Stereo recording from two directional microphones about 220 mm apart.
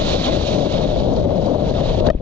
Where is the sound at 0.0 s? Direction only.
5° left (ahead or behind).